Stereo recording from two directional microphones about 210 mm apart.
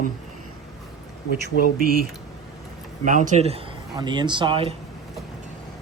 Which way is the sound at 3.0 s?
35° right (ahead or behind).